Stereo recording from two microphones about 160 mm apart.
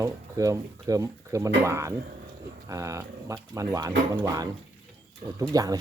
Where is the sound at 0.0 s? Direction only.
20° right (ahead or behind).